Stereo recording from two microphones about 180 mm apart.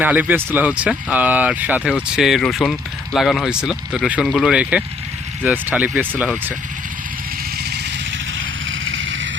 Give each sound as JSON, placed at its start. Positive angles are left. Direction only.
{"t": 0.0, "sound": "speech", "side_deg": -10}
{"t": 8.4, "sound": "vehicle", "side_deg": -90}